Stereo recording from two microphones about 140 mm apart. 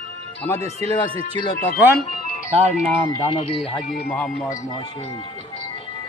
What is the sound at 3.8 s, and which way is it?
Speech, 80° left.